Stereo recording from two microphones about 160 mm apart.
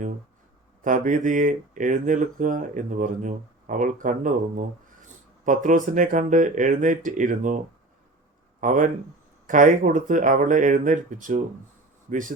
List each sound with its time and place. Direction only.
0.9 s speech: 50° right (ahead or behind)
8.6 s speech: 55° right (ahead or behind)